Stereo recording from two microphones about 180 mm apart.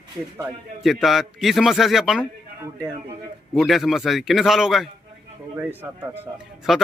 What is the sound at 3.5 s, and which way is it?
A man's voice, centre (ahead or behind).